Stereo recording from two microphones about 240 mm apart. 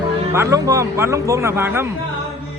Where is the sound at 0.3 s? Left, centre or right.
Centre.